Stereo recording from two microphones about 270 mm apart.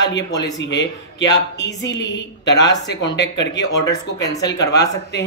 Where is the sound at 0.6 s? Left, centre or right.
Left.